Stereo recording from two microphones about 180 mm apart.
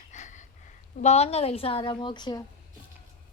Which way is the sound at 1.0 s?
35° left (ahead or behind).